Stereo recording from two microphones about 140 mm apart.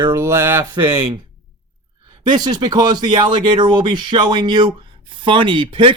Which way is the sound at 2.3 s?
30° right (ahead or behind).